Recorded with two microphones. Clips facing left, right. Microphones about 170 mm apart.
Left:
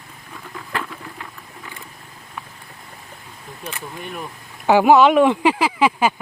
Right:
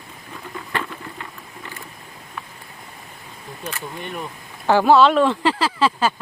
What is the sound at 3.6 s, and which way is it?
Speech, 5° left (ahead or behind).